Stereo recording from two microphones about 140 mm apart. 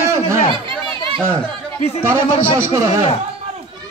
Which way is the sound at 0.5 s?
40° right (ahead or behind).